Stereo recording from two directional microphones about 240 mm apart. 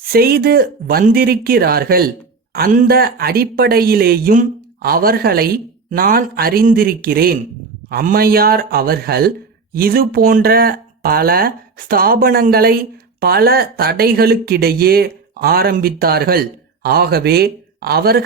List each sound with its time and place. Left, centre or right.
0.1 s speech: right